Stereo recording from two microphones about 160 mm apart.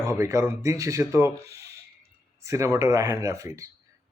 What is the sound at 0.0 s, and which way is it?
Speech, 20° right (ahead or behind).